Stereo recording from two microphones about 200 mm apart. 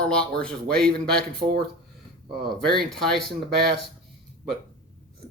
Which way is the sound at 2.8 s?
Centre (ahead or behind).